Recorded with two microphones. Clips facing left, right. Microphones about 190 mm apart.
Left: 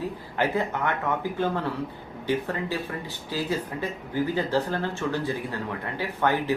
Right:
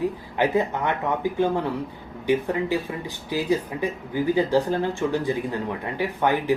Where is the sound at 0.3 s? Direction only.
15° right (ahead or behind).